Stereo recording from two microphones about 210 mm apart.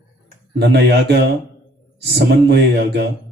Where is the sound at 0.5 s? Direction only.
50° right (ahead or behind).